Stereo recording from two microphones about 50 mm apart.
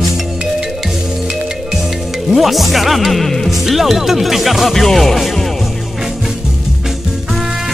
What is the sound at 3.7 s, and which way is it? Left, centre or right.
Speech, centre.